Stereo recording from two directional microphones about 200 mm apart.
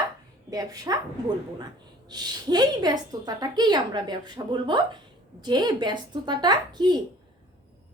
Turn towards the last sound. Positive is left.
turn(degrees=-20)  # may be behind; listen again after turning